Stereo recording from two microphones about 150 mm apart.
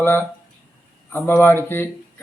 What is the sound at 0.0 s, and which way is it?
A man's voice, 15° left (ahead or behind).